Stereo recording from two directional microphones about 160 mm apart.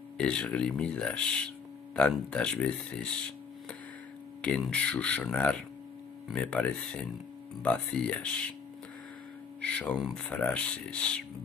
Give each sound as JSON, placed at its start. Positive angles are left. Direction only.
{"t": 0.2, "sound": "speech", "side_deg": 5}
{"t": 4.4, "sound": "speech", "side_deg": 5}
{"t": 9.6, "sound": "speech", "side_deg": 10}